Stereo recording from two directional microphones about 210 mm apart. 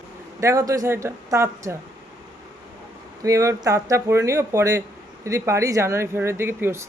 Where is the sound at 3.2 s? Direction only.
15° right (ahead or behind).